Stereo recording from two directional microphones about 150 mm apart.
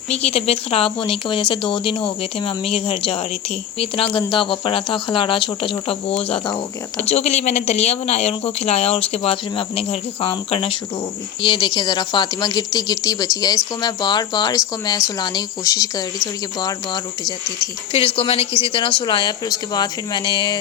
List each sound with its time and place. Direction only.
0.1 s a woman's voice: 45° left (ahead or behind); by 17.3 s 30° left (ahead or behind)
17.9 s a woman's voice: 40° left (ahead or behind)